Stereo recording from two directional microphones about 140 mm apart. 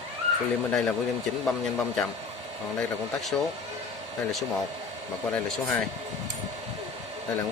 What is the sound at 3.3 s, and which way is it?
Speech, 15° left (ahead or behind).